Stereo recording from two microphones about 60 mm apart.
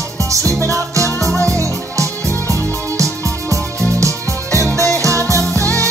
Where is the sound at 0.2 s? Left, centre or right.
Right.